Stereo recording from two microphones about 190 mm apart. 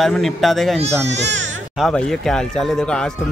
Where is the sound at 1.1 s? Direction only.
65° right (ahead or behind).